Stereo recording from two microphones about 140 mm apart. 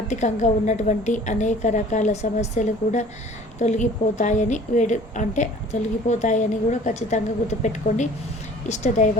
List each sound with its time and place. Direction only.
0.1 s a woman's voice: 60° left (ahead or behind)